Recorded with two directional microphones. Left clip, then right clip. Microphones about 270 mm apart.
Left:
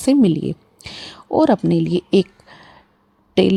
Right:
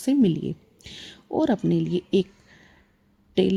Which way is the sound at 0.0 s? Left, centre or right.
Left.